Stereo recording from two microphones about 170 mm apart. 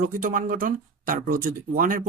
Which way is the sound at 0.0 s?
50° right (ahead or behind).